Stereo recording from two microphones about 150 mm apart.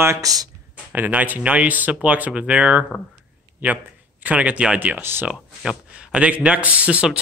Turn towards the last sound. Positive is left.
turn(degrees=-5)  # may be behind; listen again after turning